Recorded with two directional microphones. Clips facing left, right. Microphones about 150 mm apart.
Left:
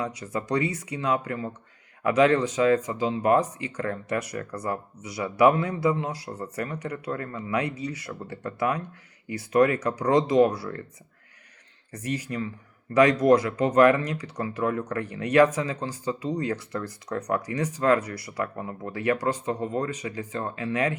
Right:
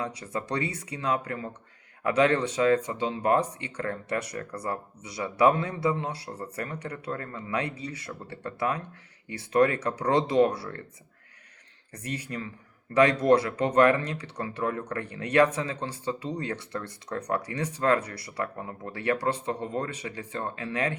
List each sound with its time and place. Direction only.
0.0 s speech: 30° right (ahead or behind)
12.0 s speech: 30° right (ahead or behind)